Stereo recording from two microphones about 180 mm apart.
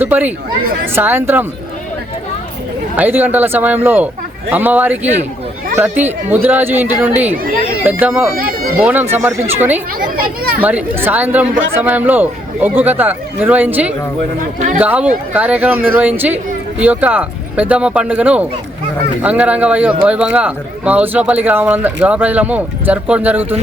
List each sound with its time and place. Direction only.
0.0 s speech: 10° right (ahead or behind)
2.9 s speech: 10° right (ahead or behind)
8.4 s speech: 55° right (ahead or behind)
8.8 s speech: 10° right (ahead or behind)
10.0 s a child's voice: 55° right (ahead or behind)
10.6 s speech: 10° right (ahead or behind)